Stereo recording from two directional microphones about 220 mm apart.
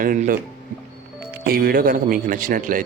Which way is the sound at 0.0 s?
40° right (ahead or behind).